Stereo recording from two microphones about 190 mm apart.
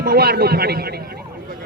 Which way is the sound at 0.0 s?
55° right (ahead or behind).